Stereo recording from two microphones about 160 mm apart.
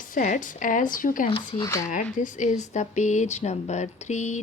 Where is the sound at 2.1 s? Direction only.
50° left (ahead or behind).